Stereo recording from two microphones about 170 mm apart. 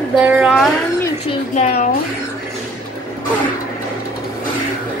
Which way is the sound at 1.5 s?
40° left (ahead or behind).